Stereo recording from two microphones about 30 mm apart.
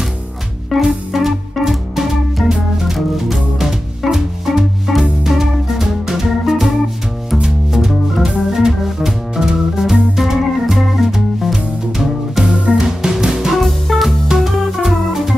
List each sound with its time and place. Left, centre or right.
0.8 s music: centre
8.5 s organ: centre
11.1 s music: centre
12.4 s music: right
13.6 s music: centre
14.9 s music: centre